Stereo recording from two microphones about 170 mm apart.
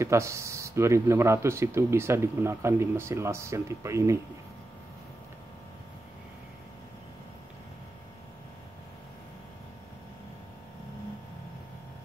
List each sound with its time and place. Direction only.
0.0 s speech: 15° right (ahead or behind)